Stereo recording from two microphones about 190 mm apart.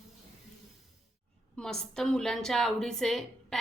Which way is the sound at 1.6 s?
5° left (ahead or behind).